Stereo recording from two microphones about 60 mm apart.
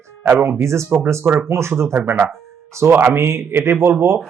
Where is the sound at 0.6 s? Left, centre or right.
Right.